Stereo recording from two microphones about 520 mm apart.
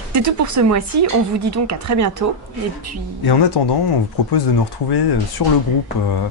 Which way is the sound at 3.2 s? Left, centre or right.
Left.